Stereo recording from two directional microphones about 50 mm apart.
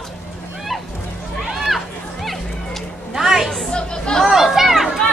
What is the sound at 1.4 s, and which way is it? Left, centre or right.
Music, centre.